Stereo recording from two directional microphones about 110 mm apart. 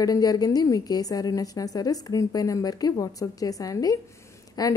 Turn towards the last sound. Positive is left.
turn(degrees=35)  # may be behind; listen again after turning